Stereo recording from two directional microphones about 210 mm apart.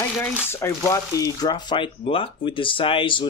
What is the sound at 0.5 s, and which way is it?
Speech, 15° left (ahead or behind).